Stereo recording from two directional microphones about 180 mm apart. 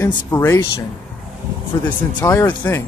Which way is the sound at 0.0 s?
15° left (ahead or behind).